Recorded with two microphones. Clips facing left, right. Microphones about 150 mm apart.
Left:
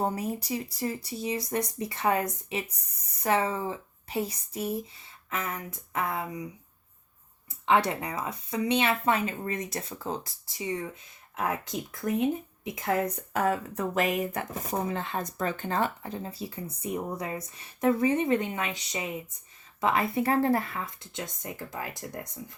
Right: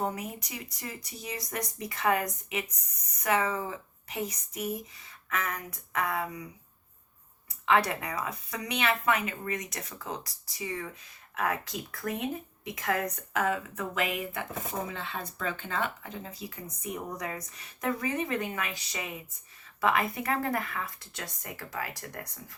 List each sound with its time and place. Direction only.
0.0 s speech: 30° left (ahead or behind)
7.6 s speech: 25° left (ahead or behind)